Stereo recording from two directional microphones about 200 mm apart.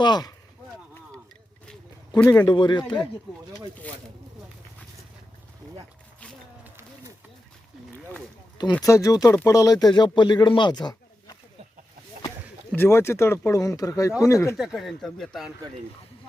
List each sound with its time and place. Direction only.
0.0 s speech: 20° left (ahead or behind)
2.4 s speech: 20° left (ahead or behind)
8.7 s speech: 15° left (ahead or behind)
12.7 s speech: 10° left (ahead or behind)
14.5 s speech: centre (ahead or behind)